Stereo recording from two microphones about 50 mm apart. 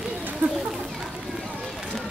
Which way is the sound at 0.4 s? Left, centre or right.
Right.